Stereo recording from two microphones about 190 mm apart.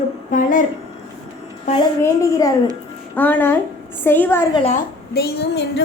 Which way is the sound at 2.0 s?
15° left (ahead or behind).